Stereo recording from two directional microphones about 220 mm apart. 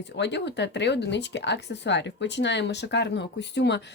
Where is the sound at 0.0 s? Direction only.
50° left (ahead or behind).